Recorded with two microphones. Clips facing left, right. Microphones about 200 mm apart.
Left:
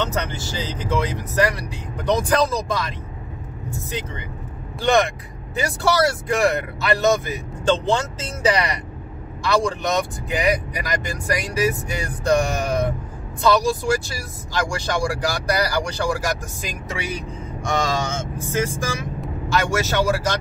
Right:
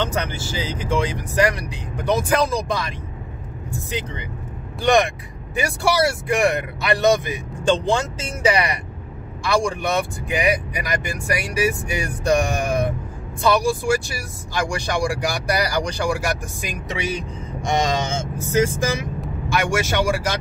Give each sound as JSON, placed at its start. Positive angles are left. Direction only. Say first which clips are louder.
{"t": 0.0, "sound": "speech", "louder": "right 1 dB", "side_deg": -10}
{"t": 4.8, "sound": "speech", "louder": "right 1 dB", "side_deg": -15}
{"t": 19.5, "sound": "speech", "louder": "even", "side_deg": -15}